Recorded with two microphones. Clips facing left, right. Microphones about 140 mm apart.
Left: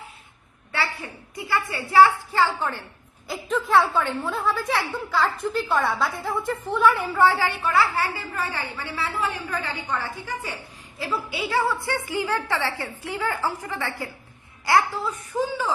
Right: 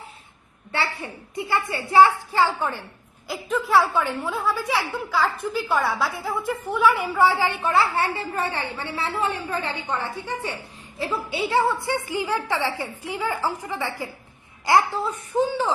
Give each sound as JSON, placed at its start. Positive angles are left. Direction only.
{"t": 0.7, "sound": "a woman's voice", "side_deg": -25}
{"t": 3.2, "sound": "a woman's voice", "side_deg": 0}